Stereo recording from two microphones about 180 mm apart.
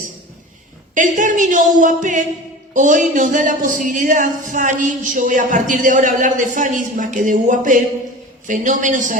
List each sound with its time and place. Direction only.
0.9 s speech: 45° right (ahead or behind)